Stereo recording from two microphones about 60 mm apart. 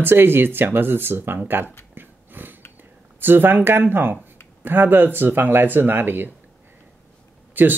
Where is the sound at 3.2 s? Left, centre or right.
Right.